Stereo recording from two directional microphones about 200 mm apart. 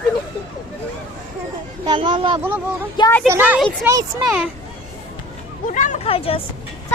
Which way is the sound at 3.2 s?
10° right (ahead or behind).